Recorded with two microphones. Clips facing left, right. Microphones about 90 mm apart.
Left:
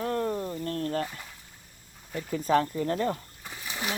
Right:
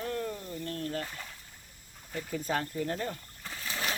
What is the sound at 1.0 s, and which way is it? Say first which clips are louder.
Speech: left 6 dB; 15° left (ahead or behind).